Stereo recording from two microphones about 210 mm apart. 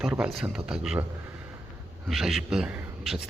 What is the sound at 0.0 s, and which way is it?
Speech, 5° right (ahead or behind).